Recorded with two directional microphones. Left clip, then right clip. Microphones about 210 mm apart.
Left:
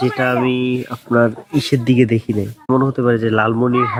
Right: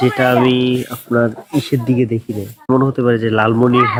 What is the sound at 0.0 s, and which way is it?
Speech, 15° right (ahead or behind).